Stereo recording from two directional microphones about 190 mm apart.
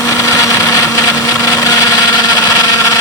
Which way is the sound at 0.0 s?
15° left (ahead or behind).